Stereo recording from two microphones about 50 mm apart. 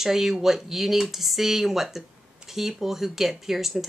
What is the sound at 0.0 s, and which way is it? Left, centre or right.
Speech, centre.